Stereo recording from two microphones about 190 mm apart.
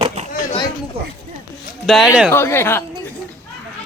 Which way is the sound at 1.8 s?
Centre (ahead or behind).